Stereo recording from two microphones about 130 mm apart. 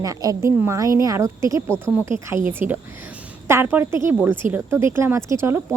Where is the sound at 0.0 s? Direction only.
25° right (ahead or behind).